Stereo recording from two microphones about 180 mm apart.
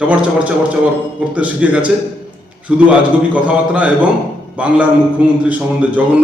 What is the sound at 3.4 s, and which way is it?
A man's voice, 5° right (ahead or behind).